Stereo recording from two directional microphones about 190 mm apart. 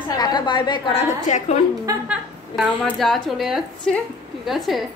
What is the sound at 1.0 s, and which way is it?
Speech, 35° left (ahead or behind).